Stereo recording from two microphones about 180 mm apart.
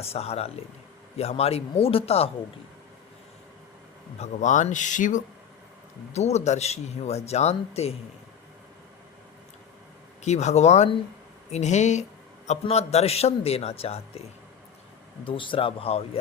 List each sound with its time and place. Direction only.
0.0 s speech: 35° left (ahead or behind)
4.2 s speech: 40° left (ahead or behind)
10.2 s speech: 40° left (ahead or behind)
15.2 s speech: 30° left (ahead or behind)